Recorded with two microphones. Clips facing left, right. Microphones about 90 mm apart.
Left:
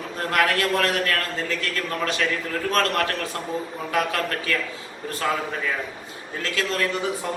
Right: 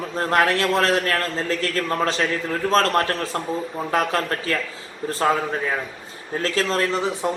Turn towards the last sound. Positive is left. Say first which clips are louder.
# right 3 dB
turn(degrees=-30)  # may be behind; listen again after turning